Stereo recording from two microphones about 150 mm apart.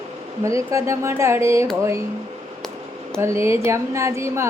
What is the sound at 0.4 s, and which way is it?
Speech, 20° right (ahead or behind).